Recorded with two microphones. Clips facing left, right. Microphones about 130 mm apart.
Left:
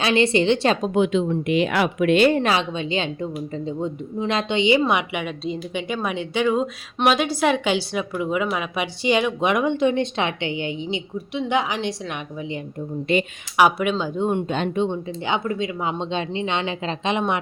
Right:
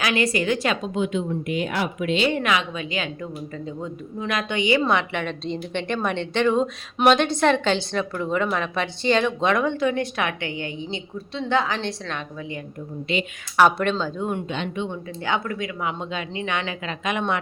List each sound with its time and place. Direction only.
0.0 s speech: 25° left (ahead or behind)
0.9 s speech: 75° left (ahead or behind); by 2.3 s 60° left (ahead or behind)
2.3 s a woman's voice: 35° left (ahead or behind); by 12.5 s 15° left (ahead or behind)
13.6 s a woman's voice: 10° left (ahead or behind)
14.2 s speech: 25° left (ahead or behind)
14.4 s speech: 45° left (ahead or behind)
14.8 s speech: 20° left (ahead or behind)